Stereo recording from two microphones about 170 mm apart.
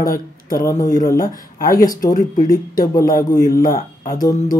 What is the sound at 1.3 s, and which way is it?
Speech, 55° left (ahead or behind).